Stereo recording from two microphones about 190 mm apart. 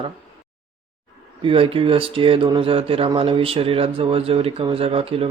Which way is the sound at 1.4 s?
30° right (ahead or behind).